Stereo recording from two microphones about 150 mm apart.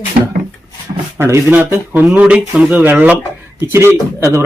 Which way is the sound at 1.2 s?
15° right (ahead or behind).